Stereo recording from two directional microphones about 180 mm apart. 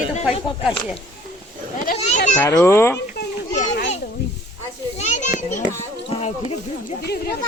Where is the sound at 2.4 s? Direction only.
15° left (ahead or behind).